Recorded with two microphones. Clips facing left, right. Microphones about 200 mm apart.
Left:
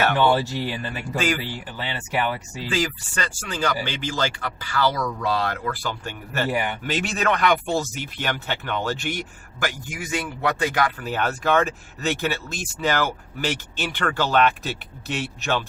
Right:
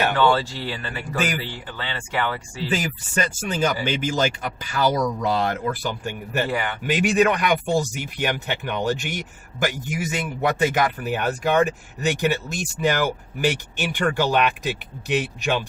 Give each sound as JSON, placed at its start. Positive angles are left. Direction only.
{"t": 0.2, "sound": "speech", "side_deg": 15}
{"t": 2.6, "sound": "speech", "side_deg": -20}
{"t": 6.5, "sound": "speech", "side_deg": 15}
{"t": 6.8, "sound": "speech", "side_deg": -15}